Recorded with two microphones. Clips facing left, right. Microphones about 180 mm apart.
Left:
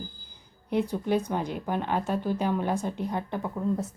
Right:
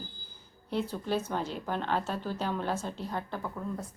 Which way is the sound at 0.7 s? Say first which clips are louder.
Left 5 dB; 15° left (ahead or behind).